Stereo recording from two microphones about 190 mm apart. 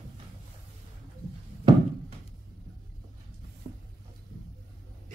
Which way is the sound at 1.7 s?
20° right (ahead or behind).